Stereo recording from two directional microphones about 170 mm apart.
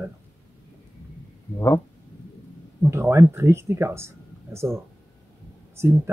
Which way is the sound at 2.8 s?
15° right (ahead or behind).